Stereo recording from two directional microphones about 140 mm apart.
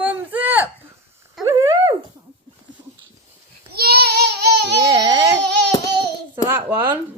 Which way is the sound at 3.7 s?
90° right.